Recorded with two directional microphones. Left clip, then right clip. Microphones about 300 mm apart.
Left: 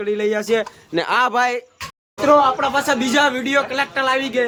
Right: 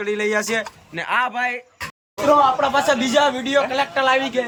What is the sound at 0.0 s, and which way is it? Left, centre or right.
Speech, centre.